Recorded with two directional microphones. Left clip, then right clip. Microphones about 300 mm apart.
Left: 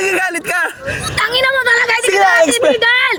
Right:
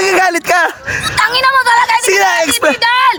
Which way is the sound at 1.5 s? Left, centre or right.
Right.